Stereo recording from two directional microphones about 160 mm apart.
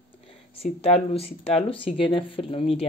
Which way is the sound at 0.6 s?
40° left (ahead or behind).